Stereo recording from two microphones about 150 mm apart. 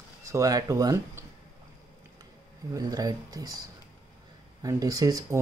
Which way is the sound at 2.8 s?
25° right (ahead or behind).